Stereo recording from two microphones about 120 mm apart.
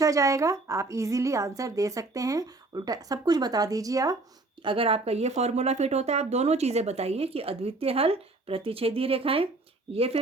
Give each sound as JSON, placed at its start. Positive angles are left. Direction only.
{"t": 0.0, "sound": "a woman's voice", "side_deg": -25}
{"t": 4.6, "sound": "speech", "side_deg": -45}